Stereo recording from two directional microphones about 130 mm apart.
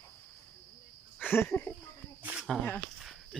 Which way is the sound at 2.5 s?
10° left (ahead or behind).